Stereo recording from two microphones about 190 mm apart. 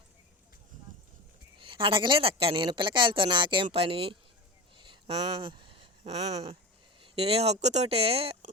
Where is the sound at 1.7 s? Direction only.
25° right (ahead or behind).